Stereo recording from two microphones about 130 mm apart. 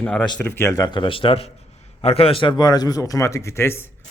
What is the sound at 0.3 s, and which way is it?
A man's voice, 20° left (ahead or behind).